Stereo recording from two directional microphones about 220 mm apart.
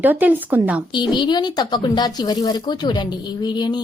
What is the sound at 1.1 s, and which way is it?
Speech, 20° left (ahead or behind).